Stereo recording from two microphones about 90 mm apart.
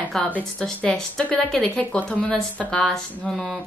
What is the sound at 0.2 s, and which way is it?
A woman's voice, 5° left (ahead or behind).